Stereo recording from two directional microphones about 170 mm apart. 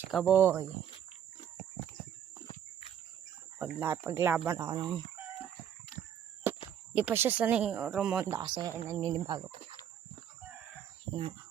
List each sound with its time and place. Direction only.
0.0 s speech: 5° right (ahead or behind)
3.6 s speech: 10° right (ahead or behind)
6.5 s a sound: 15° right (ahead or behind)
6.9 s speech: 10° right (ahead or behind)
8.3 s a man's voice: 25° right (ahead or behind)